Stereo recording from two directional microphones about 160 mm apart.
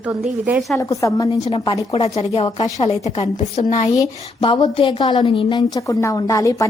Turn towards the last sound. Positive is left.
turn(degrees=20)  # may be behind; listen again after turning